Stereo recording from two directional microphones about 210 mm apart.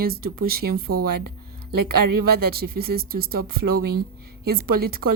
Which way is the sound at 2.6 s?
45° right (ahead or behind).